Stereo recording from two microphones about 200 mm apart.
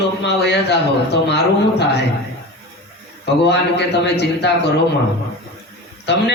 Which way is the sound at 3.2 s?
60° left (ahead or behind).